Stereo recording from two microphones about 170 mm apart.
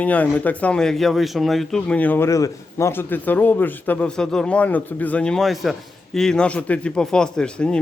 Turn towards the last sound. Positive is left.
turn(degrees=5)  # may be behind; listen again after turning